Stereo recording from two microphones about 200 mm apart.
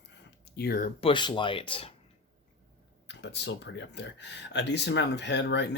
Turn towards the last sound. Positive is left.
turn(degrees=60)  # may be behind; listen again after turning